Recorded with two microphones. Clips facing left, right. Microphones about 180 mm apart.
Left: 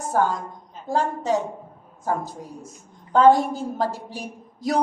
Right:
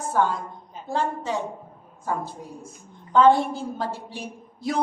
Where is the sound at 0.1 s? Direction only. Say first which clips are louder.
Left 1 dB; 45° left (ahead or behind).